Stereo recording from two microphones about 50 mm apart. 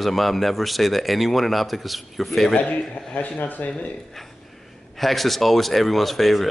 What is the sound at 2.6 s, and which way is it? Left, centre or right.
A man's voice, left.